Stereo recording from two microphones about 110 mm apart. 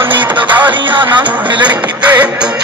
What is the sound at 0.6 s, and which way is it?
Speech, 45° right (ahead or behind).